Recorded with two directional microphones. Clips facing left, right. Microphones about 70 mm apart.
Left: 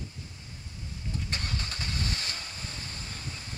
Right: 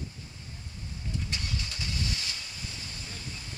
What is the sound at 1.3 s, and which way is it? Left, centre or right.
Vehicle, left.